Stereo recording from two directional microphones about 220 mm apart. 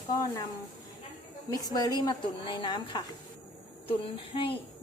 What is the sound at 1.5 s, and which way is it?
Speech, 15° left (ahead or behind).